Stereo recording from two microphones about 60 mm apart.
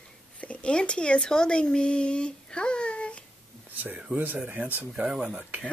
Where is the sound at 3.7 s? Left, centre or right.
Right.